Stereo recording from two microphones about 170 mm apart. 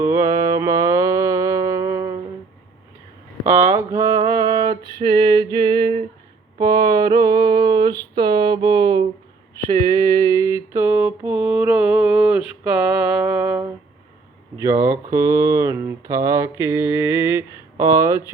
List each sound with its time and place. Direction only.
0.0 s music: 20° right (ahead or behind)
3.7 s mantra: 20° right (ahead or behind)
5.1 s music: 30° right (ahead or behind)
6.6 s mantra: 25° right (ahead or behind)
14.6 s speech: 15° right (ahead or behind)